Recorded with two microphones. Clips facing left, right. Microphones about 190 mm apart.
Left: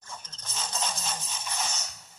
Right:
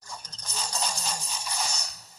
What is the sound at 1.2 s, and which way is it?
Music, 35° right (ahead or behind).